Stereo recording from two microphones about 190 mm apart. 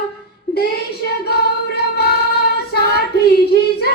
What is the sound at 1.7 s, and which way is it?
Female singing, 55° left (ahead or behind).